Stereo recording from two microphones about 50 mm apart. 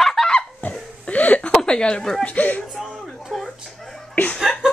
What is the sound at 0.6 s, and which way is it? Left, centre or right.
Laughter, left.